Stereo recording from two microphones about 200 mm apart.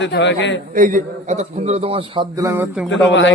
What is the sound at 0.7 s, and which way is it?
A man's voice, 40° right (ahead or behind).